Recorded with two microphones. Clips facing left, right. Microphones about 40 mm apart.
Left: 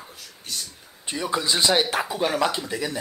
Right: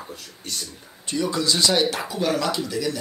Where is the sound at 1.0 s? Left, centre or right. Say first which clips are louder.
Right 2 dB; left.